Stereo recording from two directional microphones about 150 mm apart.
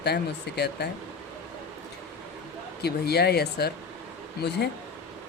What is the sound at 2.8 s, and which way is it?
Speech, 90° left.